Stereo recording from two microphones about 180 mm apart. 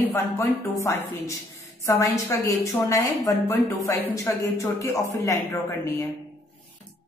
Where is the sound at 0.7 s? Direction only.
15° left (ahead or behind).